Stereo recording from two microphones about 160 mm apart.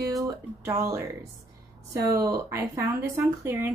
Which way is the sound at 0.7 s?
15° right (ahead or behind).